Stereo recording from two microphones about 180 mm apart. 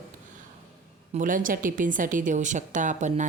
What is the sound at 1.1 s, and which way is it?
A woman's voice, 45° right (ahead or behind).